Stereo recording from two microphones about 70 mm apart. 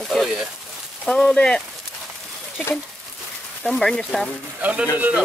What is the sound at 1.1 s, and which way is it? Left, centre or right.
Speech, centre.